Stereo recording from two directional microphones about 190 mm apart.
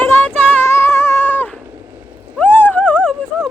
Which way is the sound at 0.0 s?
10° left (ahead or behind).